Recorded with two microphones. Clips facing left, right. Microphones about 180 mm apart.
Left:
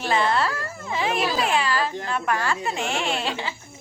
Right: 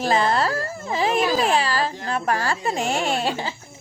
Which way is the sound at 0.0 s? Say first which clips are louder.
Right 2 dB; 40° right (ahead or behind).